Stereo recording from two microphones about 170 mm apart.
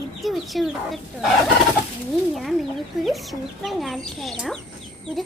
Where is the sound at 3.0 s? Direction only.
Centre (ahead or behind).